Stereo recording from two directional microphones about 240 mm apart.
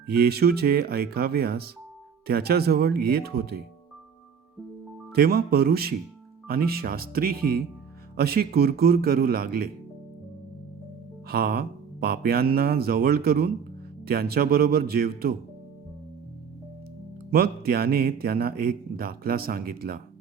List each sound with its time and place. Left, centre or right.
0.1 s a man's voice: right
5.1 s a man's voice: right
11.3 s a man's voice: right
17.3 s a man's voice: right